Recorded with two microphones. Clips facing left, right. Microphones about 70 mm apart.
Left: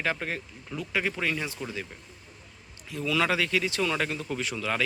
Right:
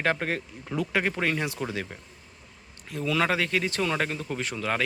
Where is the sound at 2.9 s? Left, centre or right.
Right.